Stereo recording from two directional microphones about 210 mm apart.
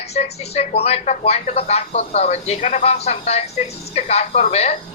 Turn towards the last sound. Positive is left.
turn(degrees=30)  # may be behind; listen again after turning